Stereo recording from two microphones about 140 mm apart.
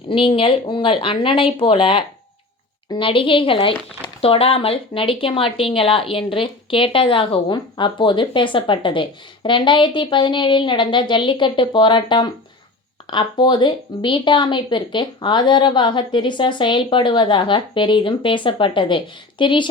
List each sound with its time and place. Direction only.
0.1 s speech: 40° left (ahead or behind)